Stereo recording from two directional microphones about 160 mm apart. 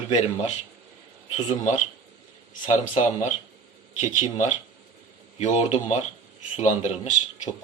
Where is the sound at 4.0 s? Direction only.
50° left (ahead or behind).